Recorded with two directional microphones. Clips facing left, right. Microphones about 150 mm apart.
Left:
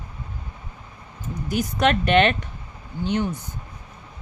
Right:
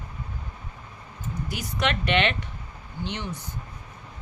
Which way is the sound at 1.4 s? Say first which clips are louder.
Left 8 dB; 45° left (ahead or behind).